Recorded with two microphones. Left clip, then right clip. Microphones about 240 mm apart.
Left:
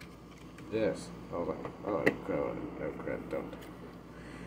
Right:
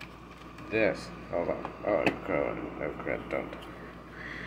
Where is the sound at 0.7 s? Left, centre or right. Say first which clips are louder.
Right 5 dB; right.